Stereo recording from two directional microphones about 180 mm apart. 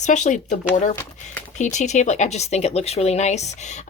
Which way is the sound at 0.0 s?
40° left (ahead or behind).